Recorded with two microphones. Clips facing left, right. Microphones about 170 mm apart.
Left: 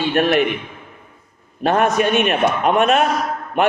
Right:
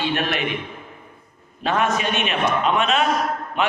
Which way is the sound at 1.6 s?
50° left (ahead or behind).